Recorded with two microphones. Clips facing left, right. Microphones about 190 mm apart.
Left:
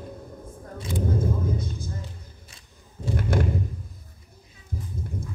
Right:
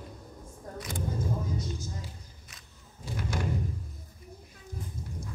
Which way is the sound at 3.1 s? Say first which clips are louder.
Left 9 dB; 60° left (ahead or behind).